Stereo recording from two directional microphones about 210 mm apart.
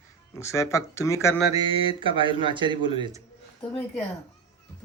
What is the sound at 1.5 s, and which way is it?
Speech, 25° right (ahead or behind).